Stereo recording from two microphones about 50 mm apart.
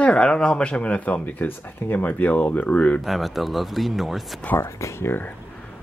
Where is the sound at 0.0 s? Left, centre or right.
Centre.